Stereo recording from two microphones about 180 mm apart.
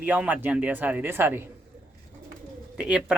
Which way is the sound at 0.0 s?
10° right (ahead or behind).